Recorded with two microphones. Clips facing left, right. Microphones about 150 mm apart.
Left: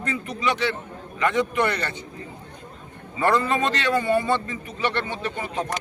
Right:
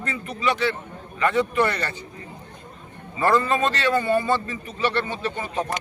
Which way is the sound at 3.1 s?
20° left (ahead or behind).